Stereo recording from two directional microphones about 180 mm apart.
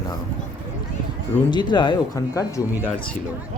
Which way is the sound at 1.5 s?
25° left (ahead or behind).